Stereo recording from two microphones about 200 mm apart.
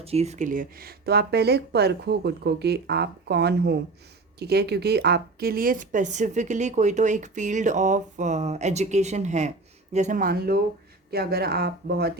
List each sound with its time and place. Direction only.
0.0 s speech: 30° right (ahead or behind); by 12.1 s 55° right (ahead or behind)